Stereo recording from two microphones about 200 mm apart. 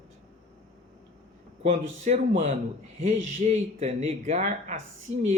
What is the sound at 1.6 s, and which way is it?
Speech, 35° right (ahead or behind).